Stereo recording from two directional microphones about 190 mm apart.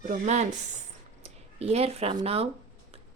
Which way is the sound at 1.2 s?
35° right (ahead or behind).